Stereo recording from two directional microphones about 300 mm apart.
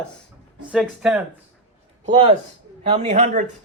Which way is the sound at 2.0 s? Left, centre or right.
Centre.